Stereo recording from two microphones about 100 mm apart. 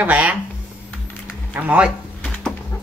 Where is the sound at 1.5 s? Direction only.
15° right (ahead or behind).